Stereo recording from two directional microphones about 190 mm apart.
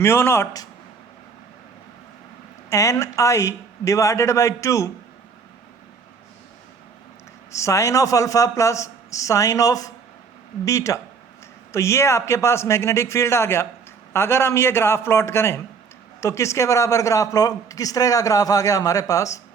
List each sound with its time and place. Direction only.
0.0 s speech: 15° left (ahead or behind)
2.6 s speech: 15° left (ahead or behind)
7.5 s speech: 15° left (ahead or behind)